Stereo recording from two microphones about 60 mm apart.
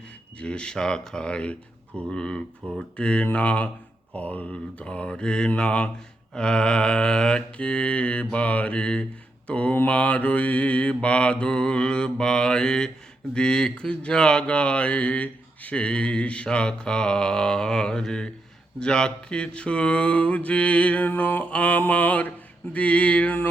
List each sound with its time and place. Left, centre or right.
0.3 s mantra: centre
3.0 s speech: centre
6.3 s mantra: centre
9.5 s speech: left
13.3 s mantra: centre
18.8 s speech: centre